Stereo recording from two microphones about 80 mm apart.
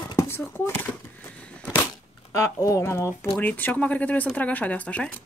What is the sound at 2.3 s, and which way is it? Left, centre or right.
Speech, left.